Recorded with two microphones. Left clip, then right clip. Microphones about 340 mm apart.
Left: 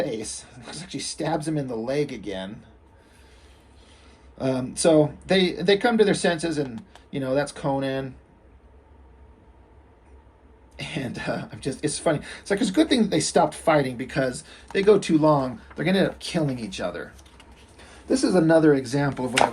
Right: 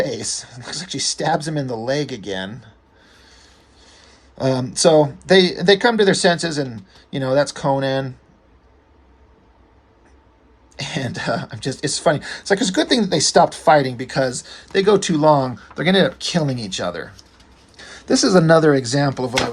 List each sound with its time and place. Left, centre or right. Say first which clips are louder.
0.0 s speech: right 6 dB; right
3.8 s speech: right 6 dB; right
10.8 s speech: right 6 dB; centre